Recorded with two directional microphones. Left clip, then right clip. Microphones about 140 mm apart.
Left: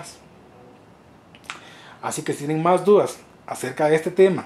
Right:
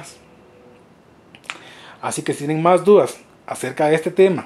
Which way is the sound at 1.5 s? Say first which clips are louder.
Right 4 dB; 15° right (ahead or behind).